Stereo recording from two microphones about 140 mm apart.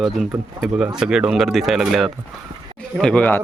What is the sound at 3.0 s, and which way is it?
Speech, 10° left (ahead or behind).